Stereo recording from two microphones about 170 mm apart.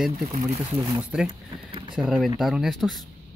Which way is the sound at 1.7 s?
30° right (ahead or behind).